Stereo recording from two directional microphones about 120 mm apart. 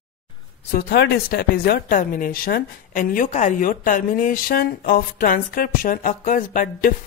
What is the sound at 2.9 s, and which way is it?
Speech, 90° left.